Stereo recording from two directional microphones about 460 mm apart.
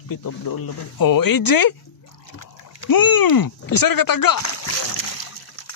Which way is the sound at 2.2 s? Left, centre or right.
Left.